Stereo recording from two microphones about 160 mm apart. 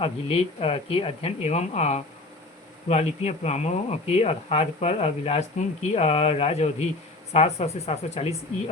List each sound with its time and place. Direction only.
0.0 s speech: 40° left (ahead or behind)